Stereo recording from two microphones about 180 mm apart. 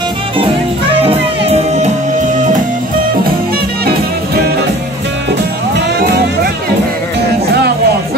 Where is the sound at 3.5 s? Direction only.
60° right (ahead or behind).